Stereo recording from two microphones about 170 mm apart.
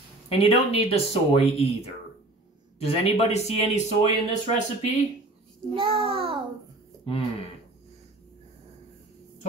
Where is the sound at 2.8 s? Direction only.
40° left (ahead or behind).